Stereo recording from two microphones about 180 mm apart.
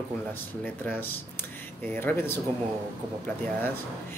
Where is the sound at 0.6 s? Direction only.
10° left (ahead or behind).